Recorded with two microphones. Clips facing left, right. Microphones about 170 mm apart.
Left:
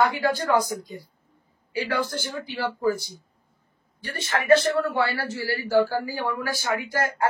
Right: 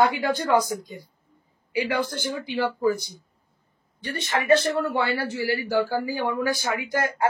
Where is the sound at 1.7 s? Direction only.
15° right (ahead or behind).